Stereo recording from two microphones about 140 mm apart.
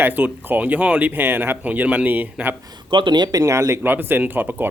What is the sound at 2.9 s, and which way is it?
Speech, 35° right (ahead or behind).